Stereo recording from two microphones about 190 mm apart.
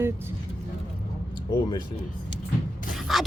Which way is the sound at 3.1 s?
Centre (ahead or behind).